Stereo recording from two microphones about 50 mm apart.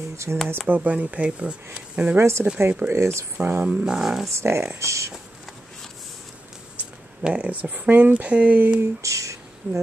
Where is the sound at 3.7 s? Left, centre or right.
Centre.